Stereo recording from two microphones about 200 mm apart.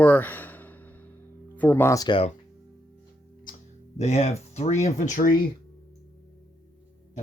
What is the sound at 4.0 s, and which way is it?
Speech, 35° left (ahead or behind).